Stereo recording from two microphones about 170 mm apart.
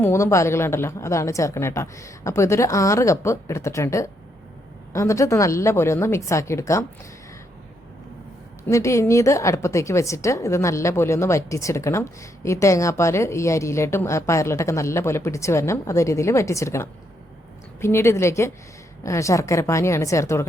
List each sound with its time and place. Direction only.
0.0 s a woman's voice: 15° left (ahead or behind)
8.6 s a woman's voice: 15° left (ahead or behind)